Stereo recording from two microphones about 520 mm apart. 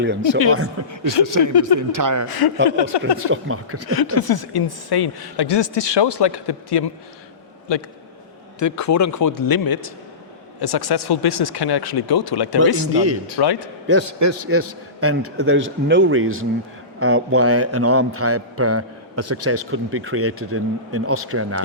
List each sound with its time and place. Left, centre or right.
0.0 s a man's voice: right
1.2 s speech: right
2.2 s a woman's voice: left
3.2 s a man's voice: right
3.8 s a woman's voice: left
8.5 s a man's voice: left
12.9 s a man's voice: right
13.4 s a woman's voice: left
13.8 s a man's voice: right